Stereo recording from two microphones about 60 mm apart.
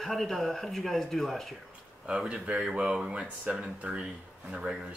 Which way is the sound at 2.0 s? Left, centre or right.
Centre.